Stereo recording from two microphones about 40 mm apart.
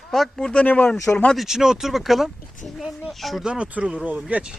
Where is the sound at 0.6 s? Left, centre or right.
Left.